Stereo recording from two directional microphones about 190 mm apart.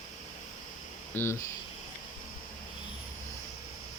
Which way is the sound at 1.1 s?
15° left (ahead or behind).